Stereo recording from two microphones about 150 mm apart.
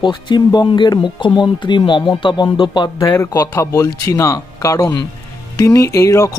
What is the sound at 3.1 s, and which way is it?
Speech, 20° left (ahead or behind).